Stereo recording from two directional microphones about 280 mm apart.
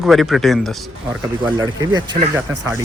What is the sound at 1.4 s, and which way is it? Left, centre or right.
Speech, centre.